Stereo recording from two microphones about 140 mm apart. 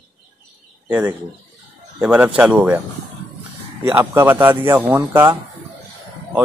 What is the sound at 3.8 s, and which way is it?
A man's voice, 20° right (ahead or behind).